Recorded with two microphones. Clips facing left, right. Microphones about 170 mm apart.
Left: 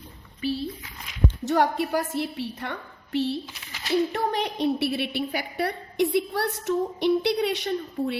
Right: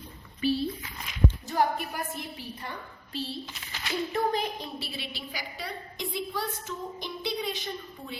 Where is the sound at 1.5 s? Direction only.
80° left.